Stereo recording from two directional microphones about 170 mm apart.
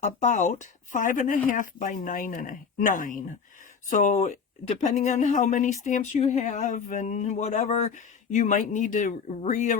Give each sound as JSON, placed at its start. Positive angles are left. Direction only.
{"t": 0.0, "sound": "speech", "side_deg": 45}